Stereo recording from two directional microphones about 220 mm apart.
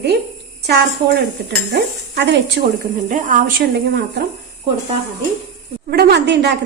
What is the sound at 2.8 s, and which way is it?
A woman's voice, 35° right (ahead or behind).